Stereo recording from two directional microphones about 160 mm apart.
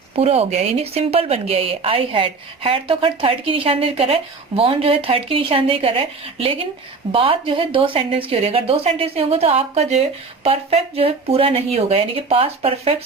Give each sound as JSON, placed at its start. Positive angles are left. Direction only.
{"t": 0.2, "sound": "speech", "side_deg": -40}